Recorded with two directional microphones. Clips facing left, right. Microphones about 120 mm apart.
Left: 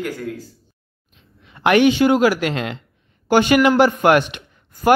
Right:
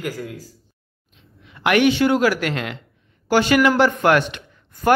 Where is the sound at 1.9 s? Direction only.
15° left (ahead or behind).